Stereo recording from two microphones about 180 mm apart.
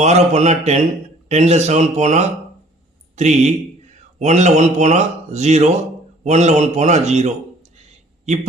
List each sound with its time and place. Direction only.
0.0 s speech: 40° right (ahead or behind)